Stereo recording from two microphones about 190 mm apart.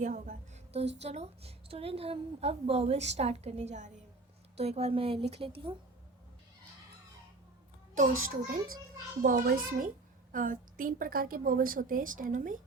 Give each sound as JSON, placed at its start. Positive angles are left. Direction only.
{"t": 0.0, "sound": "a sound", "side_deg": -40}
{"t": 1.0, "sound": "a woman's voice", "side_deg": -35}
{"t": 8.4, "sound": "a woman's voice", "side_deg": -45}